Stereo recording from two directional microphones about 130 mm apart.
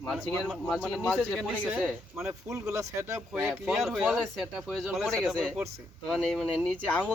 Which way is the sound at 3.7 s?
Centre (ahead or behind).